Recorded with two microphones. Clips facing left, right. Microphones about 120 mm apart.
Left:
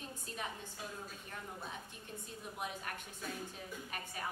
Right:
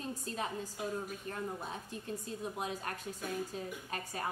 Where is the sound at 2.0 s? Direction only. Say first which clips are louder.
Right 8 dB; 35° right (ahead or behind).